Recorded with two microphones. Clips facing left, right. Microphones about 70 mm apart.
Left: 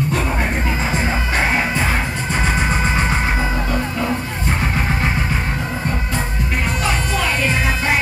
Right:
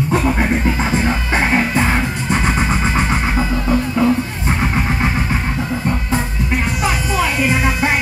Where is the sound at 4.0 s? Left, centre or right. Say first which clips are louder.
Right 9 dB; right.